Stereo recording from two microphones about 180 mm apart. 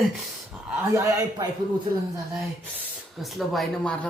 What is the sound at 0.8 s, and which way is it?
Speech, 15° right (ahead or behind).